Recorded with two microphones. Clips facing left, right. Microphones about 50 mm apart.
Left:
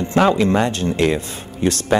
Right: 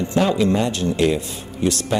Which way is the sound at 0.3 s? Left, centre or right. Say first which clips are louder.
Left 2 dB; left.